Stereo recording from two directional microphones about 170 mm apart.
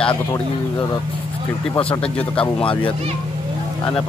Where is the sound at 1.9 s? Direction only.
10° left (ahead or behind).